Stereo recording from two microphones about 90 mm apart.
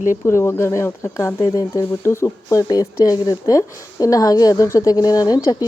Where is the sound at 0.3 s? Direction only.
30° left (ahead or behind).